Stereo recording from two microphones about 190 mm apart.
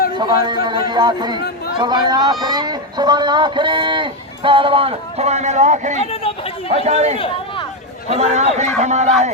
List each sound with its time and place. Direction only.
0.2 s speech: 25° right (ahead or behind); by 6.0 s 40° right (ahead or behind)
6.0 s chatter: 30° left (ahead or behind)
6.7 s speech: 35° right (ahead or behind)